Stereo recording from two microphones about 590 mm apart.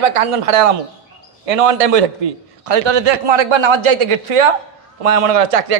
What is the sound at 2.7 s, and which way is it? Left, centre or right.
Speech, right.